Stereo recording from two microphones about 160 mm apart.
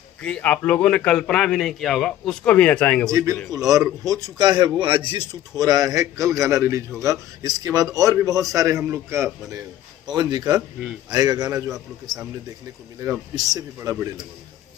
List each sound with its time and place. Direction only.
0.2 s a man's voice: 10° left (ahead or behind)
3.1 s a man's voice: 20° right (ahead or behind)
13.0 s a man's voice: 20° right (ahead or behind)